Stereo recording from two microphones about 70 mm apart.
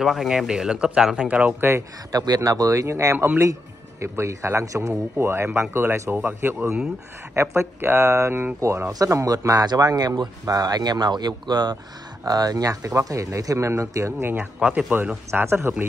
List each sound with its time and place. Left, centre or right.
0.0 s speech: centre
1.6 s speech: right
2.1 s speech: right
7.3 s speech: right
8.9 s speech: right
9.7 s speech: right
10.4 s speech: right
12.3 s speech: right
14.3 s speech: centre; by 15.7 s right